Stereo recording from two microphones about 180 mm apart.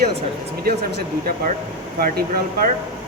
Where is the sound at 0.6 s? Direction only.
65° right (ahead or behind).